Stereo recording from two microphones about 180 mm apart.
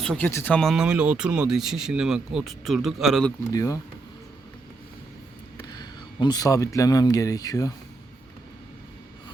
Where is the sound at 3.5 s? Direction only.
20° left (ahead or behind).